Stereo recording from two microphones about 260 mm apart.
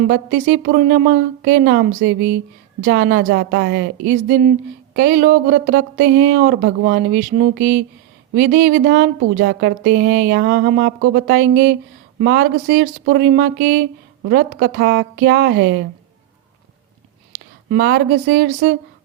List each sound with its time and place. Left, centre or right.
0.1 s speech: right
17.7 s speech: right